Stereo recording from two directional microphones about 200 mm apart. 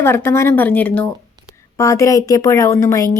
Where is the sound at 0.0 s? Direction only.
10° left (ahead or behind).